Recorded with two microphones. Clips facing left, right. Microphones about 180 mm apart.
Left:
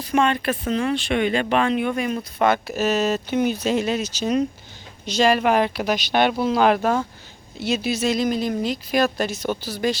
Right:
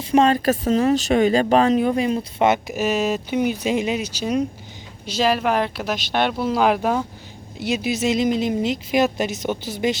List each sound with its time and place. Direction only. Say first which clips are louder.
0.0 s speech: right 4 dB; 35° right (ahead or behind)